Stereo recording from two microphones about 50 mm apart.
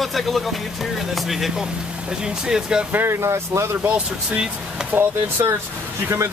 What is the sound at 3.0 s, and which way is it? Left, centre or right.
Speech, right.